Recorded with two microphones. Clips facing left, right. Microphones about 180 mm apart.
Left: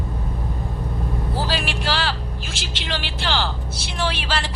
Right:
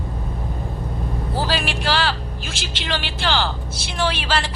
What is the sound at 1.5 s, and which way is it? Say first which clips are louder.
A woman's voice: right 2 dB; 60° right (ahead or behind).